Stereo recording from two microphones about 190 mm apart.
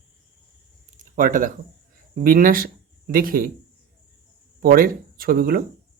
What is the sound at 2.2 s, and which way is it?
Speech, 45° right (ahead or behind).